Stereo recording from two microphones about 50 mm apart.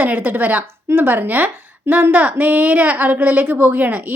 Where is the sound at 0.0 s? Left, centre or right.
Right.